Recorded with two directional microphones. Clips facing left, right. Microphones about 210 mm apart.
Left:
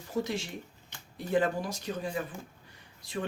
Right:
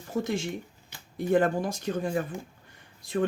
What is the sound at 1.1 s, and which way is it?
Speech, 50° right (ahead or behind).